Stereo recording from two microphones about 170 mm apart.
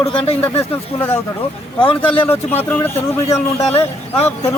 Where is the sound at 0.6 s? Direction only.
15° left (ahead or behind).